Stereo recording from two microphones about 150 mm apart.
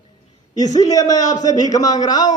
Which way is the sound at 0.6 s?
25° left (ahead or behind).